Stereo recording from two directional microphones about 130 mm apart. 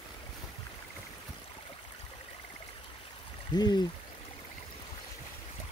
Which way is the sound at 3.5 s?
35° left (ahead or behind).